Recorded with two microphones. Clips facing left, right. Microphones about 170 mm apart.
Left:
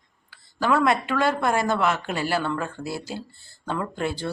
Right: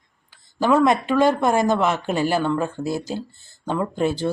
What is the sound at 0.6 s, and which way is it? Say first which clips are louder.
Speech: right 4 dB; 20° right (ahead or behind).